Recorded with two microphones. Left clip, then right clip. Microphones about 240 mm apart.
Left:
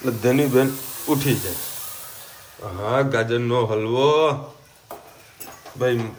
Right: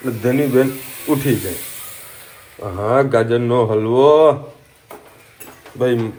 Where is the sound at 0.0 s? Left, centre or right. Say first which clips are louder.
Right 2 dB; centre.